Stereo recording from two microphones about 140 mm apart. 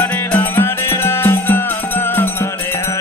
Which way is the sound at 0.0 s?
10° left (ahead or behind).